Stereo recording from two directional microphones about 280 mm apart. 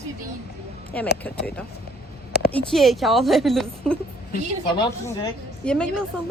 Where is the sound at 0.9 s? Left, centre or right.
Centre.